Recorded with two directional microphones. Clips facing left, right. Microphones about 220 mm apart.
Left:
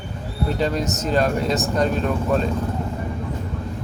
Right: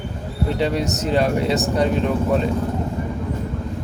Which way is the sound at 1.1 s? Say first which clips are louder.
Right 1 dB; 15° right (ahead or behind).